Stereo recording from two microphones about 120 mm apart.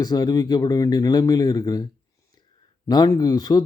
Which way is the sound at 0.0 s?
35° left (ahead or behind).